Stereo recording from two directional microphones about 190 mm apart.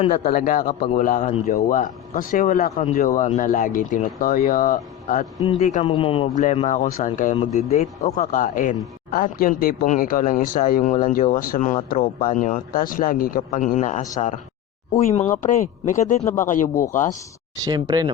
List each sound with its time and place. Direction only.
0.3 s a man's voice: 50° left (ahead or behind); by 6.2 s 30° left (ahead or behind)
6.3 s a man's voice: 40° left (ahead or behind)
16.2 s speech: 15° left (ahead or behind)
16.5 s a man's voice: 45° left (ahead or behind)
17.6 s speech: 20° right (ahead or behind)